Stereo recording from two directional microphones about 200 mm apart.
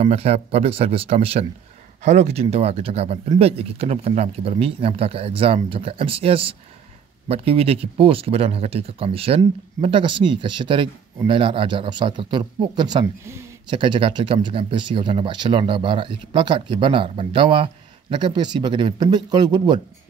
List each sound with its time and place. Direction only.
0.0 s speech: 30° right (ahead or behind)